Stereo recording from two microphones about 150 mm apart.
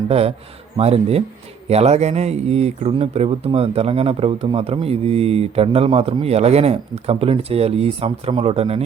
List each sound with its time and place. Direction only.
0.1 s speech: 40° right (ahead or behind)